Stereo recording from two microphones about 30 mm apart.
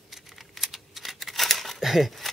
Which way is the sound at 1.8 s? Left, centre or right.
Centre.